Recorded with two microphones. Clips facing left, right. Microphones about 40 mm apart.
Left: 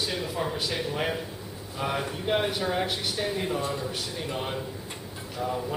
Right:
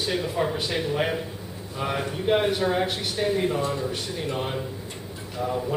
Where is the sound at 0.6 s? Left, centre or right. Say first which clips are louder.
Right 3 dB; right.